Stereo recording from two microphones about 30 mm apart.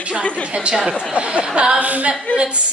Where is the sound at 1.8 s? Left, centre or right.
Right.